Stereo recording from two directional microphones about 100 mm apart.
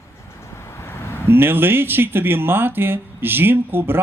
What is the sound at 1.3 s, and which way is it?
Speech, 20° right (ahead or behind).